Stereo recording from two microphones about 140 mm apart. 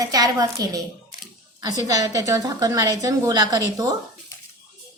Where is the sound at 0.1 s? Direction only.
25° right (ahead or behind).